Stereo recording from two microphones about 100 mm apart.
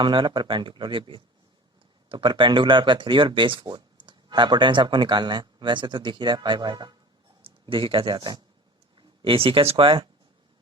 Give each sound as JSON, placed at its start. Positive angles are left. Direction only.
{"t": 0.0, "sound": "speech", "side_deg": -55}
{"t": 7.4, "sound": "speech", "side_deg": -60}
{"t": 9.0, "sound": "speech", "side_deg": -60}